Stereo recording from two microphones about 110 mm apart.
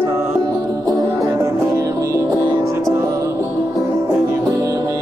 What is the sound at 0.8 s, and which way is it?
Music, 30° right (ahead or behind).